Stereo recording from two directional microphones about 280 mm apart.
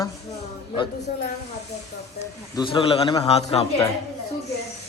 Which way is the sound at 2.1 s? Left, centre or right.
Centre.